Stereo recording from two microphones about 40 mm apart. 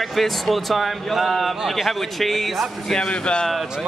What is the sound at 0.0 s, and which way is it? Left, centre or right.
Speech, centre.